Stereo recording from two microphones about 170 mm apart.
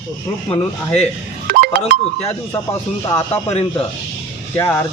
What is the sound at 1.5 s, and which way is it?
Music, 65° right (ahead or behind).